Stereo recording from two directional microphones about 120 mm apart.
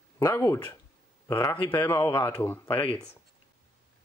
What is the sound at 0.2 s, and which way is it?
Speech, 25° left (ahead or behind).